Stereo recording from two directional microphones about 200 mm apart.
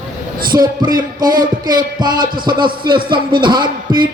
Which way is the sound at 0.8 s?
45° right (ahead or behind).